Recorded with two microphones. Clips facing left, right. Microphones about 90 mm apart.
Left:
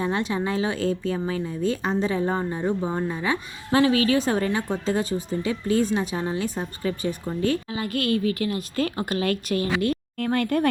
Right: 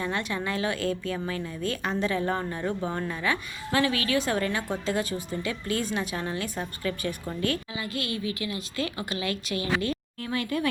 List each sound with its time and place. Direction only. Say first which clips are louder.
0.0 s a woman's voice: left 5 dB; 30° left (ahead or behind); by 10.7 s 55° left (ahead or behind)